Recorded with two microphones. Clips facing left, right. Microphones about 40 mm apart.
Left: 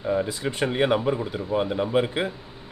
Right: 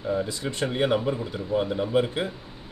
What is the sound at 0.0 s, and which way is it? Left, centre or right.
Speech, left.